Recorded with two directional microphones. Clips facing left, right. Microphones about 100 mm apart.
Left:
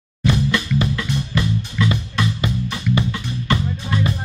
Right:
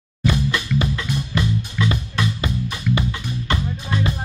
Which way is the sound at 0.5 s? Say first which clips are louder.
Left 2 dB; 20° right (ahead or behind).